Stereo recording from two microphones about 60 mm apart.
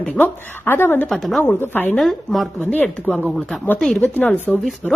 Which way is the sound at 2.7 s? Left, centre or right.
Left.